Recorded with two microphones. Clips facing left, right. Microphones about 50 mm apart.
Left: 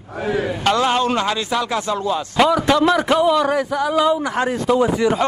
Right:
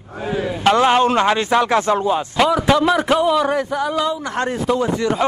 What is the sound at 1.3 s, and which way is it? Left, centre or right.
Speech, right.